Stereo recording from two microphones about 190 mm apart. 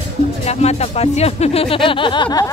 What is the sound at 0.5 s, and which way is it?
Speech, 35° left (ahead or behind).